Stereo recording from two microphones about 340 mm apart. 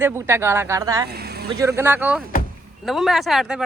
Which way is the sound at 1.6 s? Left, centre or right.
Centre.